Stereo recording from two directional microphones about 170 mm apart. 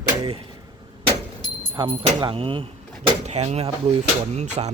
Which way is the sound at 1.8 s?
30° right (ahead or behind).